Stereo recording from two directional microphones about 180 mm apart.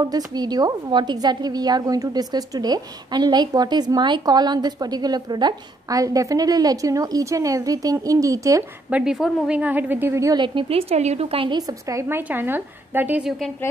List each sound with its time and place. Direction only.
0.0 s a woman's voice: 20° right (ahead or behind)
8.9 s a woman's voice: 5° right (ahead or behind)